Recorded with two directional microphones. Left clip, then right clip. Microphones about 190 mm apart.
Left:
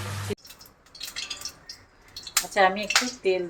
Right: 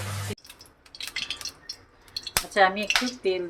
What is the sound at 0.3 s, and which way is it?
Music, 10° left (ahead or behind).